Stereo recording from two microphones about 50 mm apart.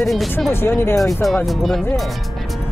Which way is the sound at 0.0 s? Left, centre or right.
Centre.